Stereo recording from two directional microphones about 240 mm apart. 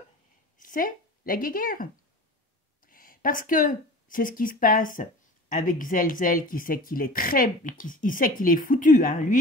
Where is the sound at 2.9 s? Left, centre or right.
Left.